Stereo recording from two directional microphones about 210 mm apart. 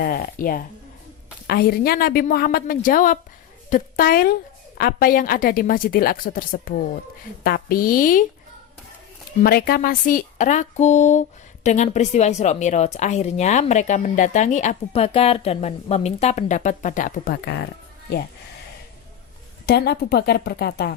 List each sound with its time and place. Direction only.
0.0 s a woman's voice: 45° left (ahead or behind)
9.4 s speech: 45° left (ahead or behind)
19.6 s a woman's voice: 50° left (ahead or behind)